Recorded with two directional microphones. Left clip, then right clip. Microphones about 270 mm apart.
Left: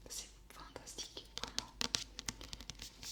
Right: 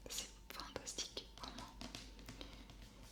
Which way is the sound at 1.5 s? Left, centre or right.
Left.